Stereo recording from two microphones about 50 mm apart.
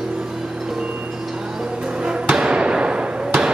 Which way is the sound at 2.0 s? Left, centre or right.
Centre.